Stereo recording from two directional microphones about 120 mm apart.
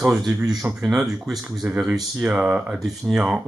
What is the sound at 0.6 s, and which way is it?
Speech, 10° right (ahead or behind).